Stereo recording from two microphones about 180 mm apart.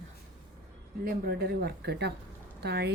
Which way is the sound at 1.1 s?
60° right (ahead or behind).